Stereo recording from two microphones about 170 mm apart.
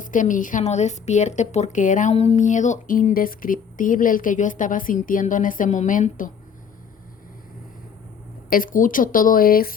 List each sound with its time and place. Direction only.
0.0 s a woman's voice: 50° left (ahead or behind)
8.4 s a woman's voice: 55° left (ahead or behind)